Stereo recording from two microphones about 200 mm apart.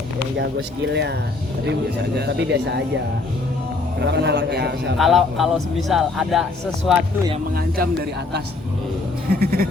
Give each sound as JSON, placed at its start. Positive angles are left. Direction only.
{"t": 1.6, "sound": "speech", "side_deg": -55}
{"t": 4.0, "sound": "speech", "side_deg": -60}
{"t": 4.9, "sound": "a man's voice", "side_deg": 0}
{"t": 9.3, "sound": "speech", "side_deg": -50}